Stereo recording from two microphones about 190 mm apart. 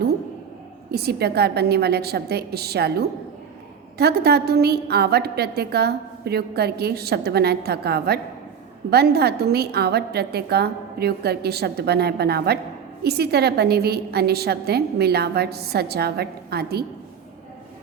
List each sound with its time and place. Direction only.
0.9 s a woman's voice: 55° right (ahead or behind)